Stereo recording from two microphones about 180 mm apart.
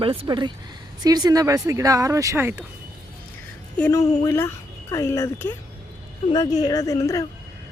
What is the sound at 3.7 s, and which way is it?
A woman's voice, 10° left (ahead or behind).